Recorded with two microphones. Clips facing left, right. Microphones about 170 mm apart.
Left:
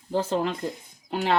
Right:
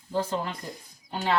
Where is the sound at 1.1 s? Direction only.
75° left (ahead or behind).